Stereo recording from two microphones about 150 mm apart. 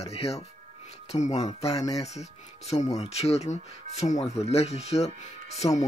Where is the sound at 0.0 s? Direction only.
45° left (ahead or behind).